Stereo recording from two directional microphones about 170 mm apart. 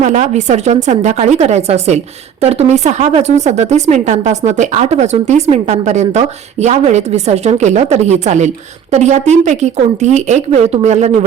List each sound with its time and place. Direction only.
0.0 s speech: 45° right (ahead or behind)